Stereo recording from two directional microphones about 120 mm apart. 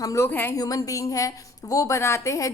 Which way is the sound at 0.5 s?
30° left (ahead or behind).